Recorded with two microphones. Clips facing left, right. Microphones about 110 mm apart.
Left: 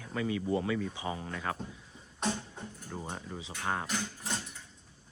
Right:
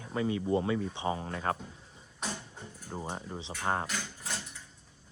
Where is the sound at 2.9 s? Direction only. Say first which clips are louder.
Right 3 dB; 25° right (ahead or behind).